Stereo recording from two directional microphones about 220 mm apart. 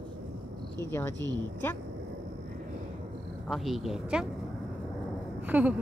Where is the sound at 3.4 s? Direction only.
Centre (ahead or behind).